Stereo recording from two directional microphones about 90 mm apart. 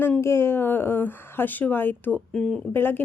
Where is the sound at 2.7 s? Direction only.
25° left (ahead or behind).